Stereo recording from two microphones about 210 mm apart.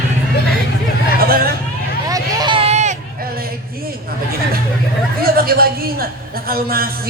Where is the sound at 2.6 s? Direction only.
30° right (ahead or behind).